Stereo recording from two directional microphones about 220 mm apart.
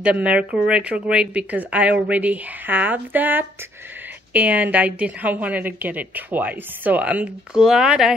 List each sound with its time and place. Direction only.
0.0 s a woman's voice: 5° right (ahead or behind)